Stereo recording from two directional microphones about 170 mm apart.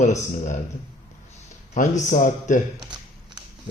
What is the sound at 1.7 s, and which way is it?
Speech, 45° left (ahead or behind).